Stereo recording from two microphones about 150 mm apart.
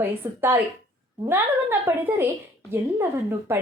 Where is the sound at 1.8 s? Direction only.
15° right (ahead or behind).